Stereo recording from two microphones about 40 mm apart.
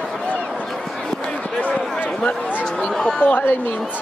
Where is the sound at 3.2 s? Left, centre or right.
Left.